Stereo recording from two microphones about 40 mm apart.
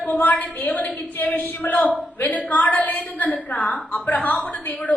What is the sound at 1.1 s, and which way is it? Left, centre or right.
A woman's voice, left.